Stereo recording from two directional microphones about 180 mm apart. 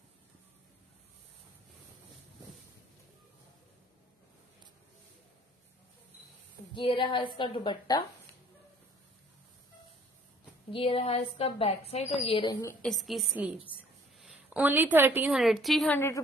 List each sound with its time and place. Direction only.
6.7 s a woman's voice: 25° left (ahead or behind)
10.7 s a woman's voice: 30° left (ahead or behind)
12.8 s a woman's voice: centre (ahead or behind)